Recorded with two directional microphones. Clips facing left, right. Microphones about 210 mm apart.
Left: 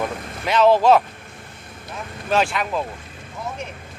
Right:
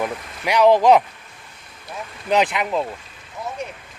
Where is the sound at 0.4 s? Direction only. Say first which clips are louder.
Right 1 dB; 15° right (ahead or behind).